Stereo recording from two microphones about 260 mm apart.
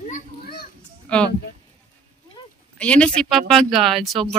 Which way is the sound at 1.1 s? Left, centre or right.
Centre.